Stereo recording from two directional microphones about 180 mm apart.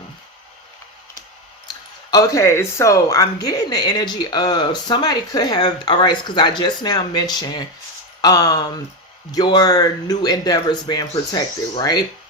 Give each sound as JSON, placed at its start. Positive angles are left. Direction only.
{"t": 1.6, "sound": "speech", "side_deg": 20}